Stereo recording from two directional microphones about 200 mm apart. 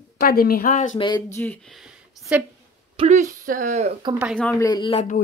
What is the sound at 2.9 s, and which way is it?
Speech, 30° right (ahead or behind).